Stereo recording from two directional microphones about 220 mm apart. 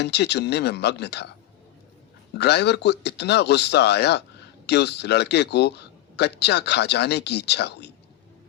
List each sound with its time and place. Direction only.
0.0 s speech: 50° left (ahead or behind)
2.4 s speech: 50° left (ahead or behind)